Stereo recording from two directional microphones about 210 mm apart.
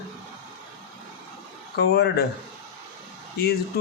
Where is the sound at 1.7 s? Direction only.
50° left (ahead or behind).